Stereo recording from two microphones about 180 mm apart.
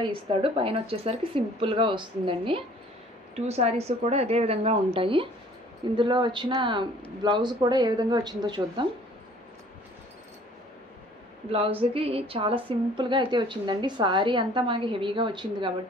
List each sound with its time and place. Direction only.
0.0 s speech: 30° right (ahead or behind)
11.5 s speech: 30° right (ahead or behind)